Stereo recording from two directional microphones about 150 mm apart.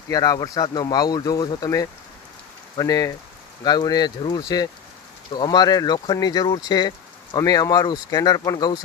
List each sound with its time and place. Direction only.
0.1 s speech: 25° left (ahead or behind)